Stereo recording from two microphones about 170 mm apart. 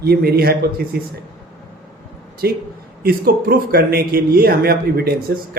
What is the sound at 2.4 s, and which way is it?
A man's voice, 70° right (ahead or behind).